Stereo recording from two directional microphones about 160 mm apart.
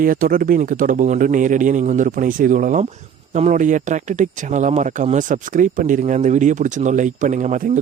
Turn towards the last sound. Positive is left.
turn(degrees=-50)  # may be behind; listen again after turning